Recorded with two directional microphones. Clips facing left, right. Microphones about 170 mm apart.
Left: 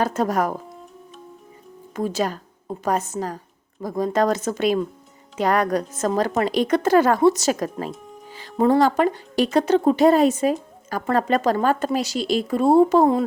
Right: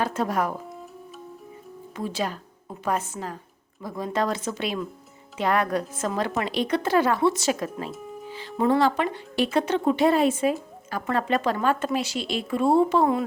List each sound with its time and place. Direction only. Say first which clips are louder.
0.0 s speech: left 4 dB; 40° left (ahead or behind)
2.0 s speech: left 5 dB; 45° left (ahead or behind)